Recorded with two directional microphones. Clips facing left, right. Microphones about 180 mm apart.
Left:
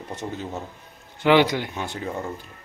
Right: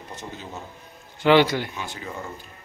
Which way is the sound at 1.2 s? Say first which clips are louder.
Even; 15° left (ahead or behind).